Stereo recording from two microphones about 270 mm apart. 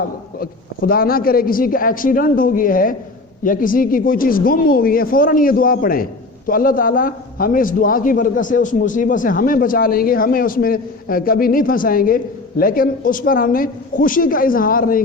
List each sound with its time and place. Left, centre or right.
0.0 s a man's voice: left